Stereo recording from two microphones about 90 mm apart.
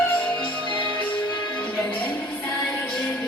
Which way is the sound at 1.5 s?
15° left (ahead or behind).